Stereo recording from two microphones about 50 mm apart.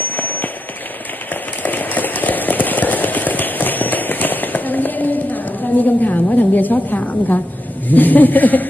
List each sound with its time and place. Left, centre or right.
0.0 s firecracker: left
1.6 s a sound: left
7.9 s a man's voice: left